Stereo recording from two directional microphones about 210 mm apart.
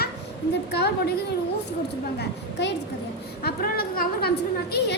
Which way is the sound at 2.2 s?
55° left (ahead or behind).